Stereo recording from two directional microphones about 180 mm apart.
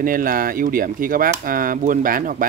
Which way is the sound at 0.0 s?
50° right (ahead or behind).